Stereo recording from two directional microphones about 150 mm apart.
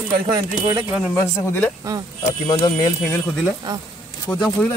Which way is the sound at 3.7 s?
30° right (ahead or behind).